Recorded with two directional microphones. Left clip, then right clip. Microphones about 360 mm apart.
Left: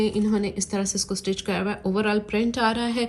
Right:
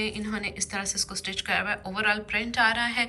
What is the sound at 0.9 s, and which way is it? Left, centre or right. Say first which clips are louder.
Speech: left 3 dB; centre.